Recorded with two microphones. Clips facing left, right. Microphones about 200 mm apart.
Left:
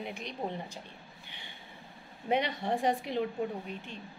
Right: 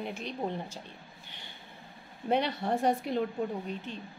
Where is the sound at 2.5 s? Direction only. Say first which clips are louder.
Right 2 dB; 15° left (ahead or behind).